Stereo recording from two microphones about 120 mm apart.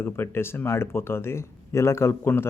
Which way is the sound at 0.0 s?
20° left (ahead or behind).